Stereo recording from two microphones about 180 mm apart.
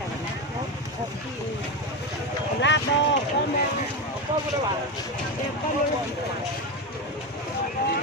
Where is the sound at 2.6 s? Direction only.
80° left.